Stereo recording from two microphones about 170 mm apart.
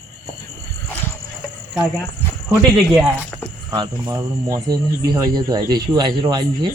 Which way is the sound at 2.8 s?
5° right (ahead or behind).